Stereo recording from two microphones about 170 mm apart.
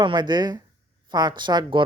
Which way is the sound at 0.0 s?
25° right (ahead or behind).